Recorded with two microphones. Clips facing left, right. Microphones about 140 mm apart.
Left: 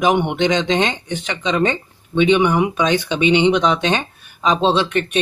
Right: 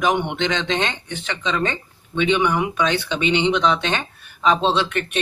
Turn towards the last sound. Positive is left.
turn(degrees=15)  # may be behind; listen again after turning